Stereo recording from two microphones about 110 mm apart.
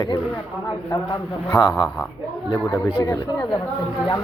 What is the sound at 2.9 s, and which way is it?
Speech, 35° left (ahead or behind).